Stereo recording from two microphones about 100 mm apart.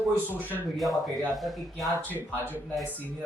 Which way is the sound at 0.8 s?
Centre (ahead or behind).